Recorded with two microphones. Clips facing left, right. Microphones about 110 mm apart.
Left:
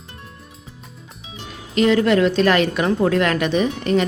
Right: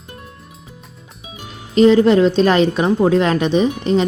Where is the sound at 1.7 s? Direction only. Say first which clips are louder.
Right 5 dB; 30° right (ahead or behind).